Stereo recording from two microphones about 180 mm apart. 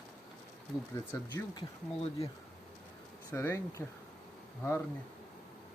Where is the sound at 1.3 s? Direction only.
30° left (ahead or behind).